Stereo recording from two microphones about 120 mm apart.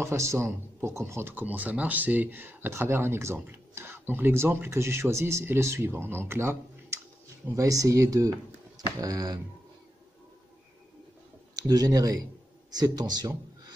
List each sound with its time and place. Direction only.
0.0 s speech: 25° right (ahead or behind)
11.5 s speech: 30° right (ahead or behind)